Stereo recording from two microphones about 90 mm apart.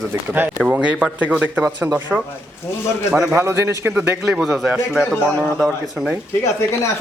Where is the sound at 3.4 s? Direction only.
30° right (ahead or behind).